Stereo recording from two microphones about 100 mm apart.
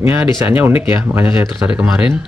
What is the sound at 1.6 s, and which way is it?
Speech, 10° right (ahead or behind).